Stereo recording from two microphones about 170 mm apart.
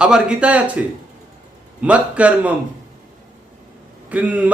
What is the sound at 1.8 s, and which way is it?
Speech, 10° right (ahead or behind).